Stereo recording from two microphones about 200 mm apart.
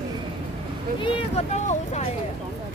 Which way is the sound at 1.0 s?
25° left (ahead or behind).